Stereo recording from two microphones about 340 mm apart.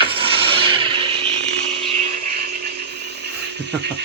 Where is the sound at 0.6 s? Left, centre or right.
Centre.